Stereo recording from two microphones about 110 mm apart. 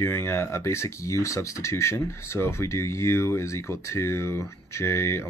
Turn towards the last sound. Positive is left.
turn(degrees=25)  # may be behind; listen again after turning